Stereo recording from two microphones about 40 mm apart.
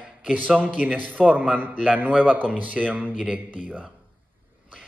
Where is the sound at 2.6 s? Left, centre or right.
Right.